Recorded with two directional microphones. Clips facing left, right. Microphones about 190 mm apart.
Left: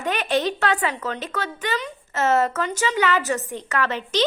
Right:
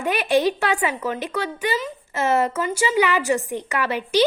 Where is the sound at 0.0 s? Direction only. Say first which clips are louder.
Right 3 dB; 10° right (ahead or behind).